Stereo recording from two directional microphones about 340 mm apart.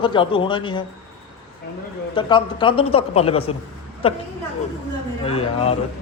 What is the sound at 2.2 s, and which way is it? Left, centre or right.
Speech, centre.